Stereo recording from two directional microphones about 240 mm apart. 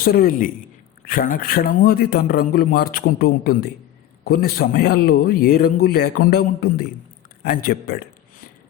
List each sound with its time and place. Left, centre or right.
0.0 s a man's voice: left